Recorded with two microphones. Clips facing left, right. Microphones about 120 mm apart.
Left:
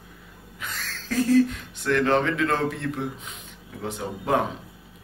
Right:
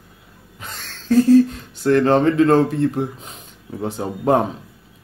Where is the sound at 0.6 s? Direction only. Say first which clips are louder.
Even; 30° right (ahead or behind).